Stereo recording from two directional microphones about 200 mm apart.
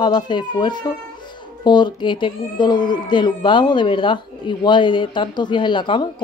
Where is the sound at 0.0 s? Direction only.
20° left (ahead or behind).